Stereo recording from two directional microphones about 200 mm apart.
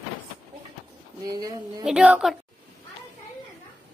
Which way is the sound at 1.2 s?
20° right (ahead or behind).